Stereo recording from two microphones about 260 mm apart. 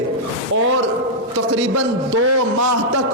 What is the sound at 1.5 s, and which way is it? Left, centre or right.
Speech, right.